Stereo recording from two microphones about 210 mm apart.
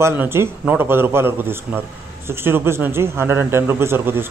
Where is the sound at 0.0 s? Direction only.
10° right (ahead or behind).